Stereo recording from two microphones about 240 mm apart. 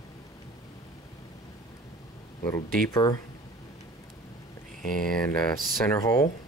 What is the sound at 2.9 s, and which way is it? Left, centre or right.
Speech, centre.